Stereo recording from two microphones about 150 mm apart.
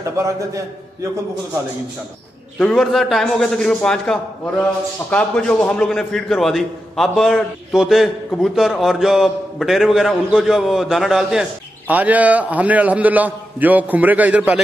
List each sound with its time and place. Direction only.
0.2 s a man's voice: 20° right (ahead or behind)
2.6 s a man's voice: centre (ahead or behind)